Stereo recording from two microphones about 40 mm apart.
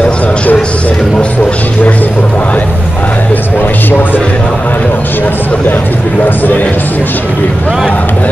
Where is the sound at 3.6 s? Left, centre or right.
Left.